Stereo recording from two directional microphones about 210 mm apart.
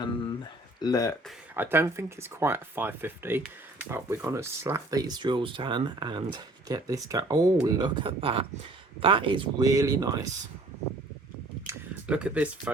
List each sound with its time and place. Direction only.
0.8 s speech: 15° left (ahead or behind)
1.5 s speech: 10° right (ahead or behind)
11.6 s a sound: 5° right (ahead or behind)